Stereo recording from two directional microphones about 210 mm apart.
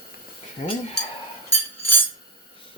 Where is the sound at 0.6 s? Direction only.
35° left (ahead or behind).